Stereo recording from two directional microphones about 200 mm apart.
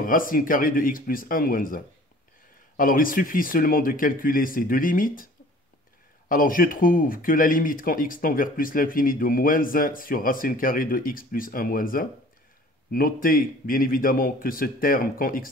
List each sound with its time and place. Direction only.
0.0 s speech: 45° left (ahead or behind)
2.8 s speech: 45° left (ahead or behind)